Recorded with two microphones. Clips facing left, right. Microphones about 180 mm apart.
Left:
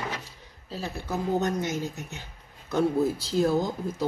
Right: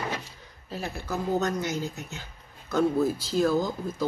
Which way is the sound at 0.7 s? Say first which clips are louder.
Even; 25° left (ahead or behind).